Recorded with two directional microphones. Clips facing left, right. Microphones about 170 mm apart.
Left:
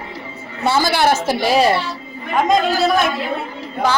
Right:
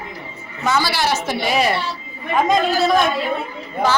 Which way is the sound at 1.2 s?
30° left (ahead or behind).